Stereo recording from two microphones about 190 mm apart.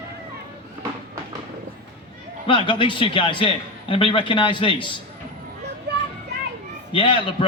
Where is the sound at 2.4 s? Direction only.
25° left (ahead or behind).